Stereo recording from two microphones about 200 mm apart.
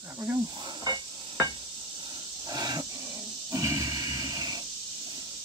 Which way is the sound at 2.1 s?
20° right (ahead or behind).